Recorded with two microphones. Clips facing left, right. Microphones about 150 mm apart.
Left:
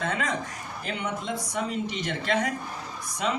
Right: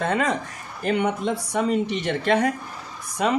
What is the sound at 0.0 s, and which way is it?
Speech, 55° right (ahead or behind).